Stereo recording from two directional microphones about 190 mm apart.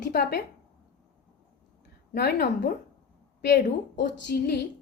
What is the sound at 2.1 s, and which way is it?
A woman's voice, 60° left (ahead or behind).